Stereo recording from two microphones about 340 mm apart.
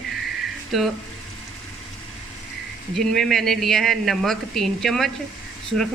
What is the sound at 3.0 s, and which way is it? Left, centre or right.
Speech, centre.